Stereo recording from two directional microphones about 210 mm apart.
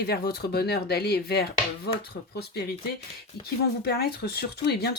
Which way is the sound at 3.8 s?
50° left (ahead or behind).